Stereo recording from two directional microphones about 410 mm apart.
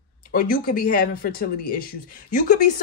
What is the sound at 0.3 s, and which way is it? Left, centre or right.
Speech, left.